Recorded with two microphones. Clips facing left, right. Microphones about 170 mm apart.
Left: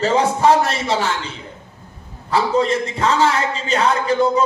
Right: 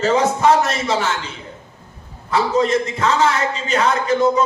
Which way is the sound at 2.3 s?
30° left (ahead or behind).